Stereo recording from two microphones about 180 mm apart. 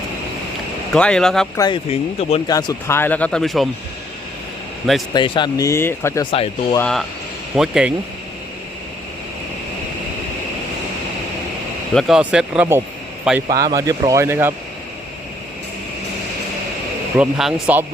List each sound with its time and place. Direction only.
0.9 s speech: 5° left (ahead or behind)
1.5 s speech: 20° left (ahead or behind)
1.9 s speech: 35° left (ahead or behind)
2.5 s speech: 20° left (ahead or behind); by 3.7 s centre (ahead or behind)
5.1 s speech: 25° left (ahead or behind)
6.3 s speech: 30° left (ahead or behind)
6.7 s speech: 5° left (ahead or behind)
11.9 s speech: centre (ahead or behind)
13.5 s speech: 20° right (ahead or behind)
17.2 s speech: 5° right (ahead or behind)